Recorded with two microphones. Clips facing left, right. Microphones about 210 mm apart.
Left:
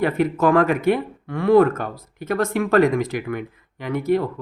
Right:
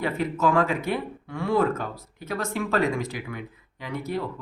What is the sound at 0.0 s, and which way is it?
Speech, 55° left (ahead or behind).